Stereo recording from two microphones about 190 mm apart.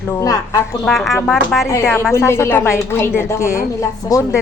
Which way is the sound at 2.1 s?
15° left (ahead or behind).